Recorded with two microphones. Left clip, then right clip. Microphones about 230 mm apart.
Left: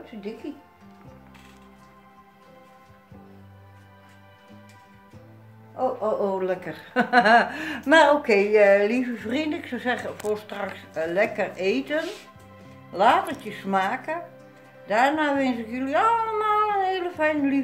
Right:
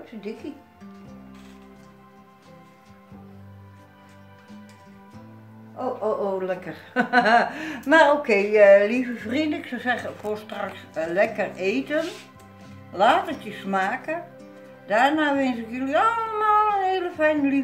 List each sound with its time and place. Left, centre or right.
0.4 s a woman's voice: centre
5.8 s music: left
6.2 s a woman's voice: left